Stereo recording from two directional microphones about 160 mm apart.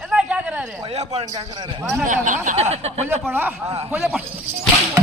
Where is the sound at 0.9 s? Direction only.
40° right (ahead or behind).